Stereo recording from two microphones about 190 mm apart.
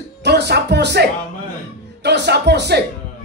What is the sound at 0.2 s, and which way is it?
Speech, 60° right (ahead or behind).